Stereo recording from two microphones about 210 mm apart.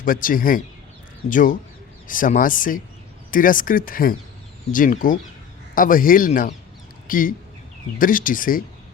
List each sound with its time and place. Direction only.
0.0 s speech: 40° left (ahead or behind)